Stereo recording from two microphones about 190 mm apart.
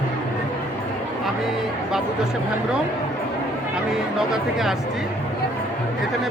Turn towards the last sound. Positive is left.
turn(degrees=0)  # may be behind; listen again after turning